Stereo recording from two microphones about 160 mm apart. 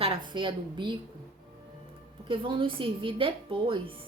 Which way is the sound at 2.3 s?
30° right (ahead or behind).